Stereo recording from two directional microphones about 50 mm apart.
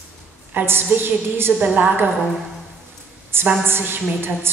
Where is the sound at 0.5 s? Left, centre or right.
Right.